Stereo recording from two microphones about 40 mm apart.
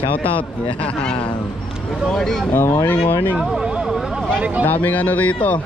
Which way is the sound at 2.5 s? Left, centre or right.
Left.